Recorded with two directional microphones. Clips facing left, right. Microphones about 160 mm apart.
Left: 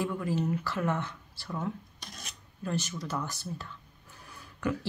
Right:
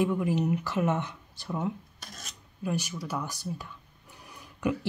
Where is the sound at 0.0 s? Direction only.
15° right (ahead or behind).